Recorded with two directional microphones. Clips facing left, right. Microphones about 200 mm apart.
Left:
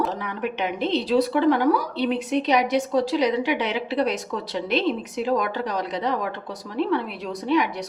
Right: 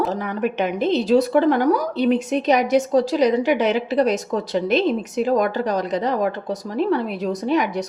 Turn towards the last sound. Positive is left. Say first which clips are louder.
# right 2 dB
turn(degrees=-45)  # may be behind; listen again after turning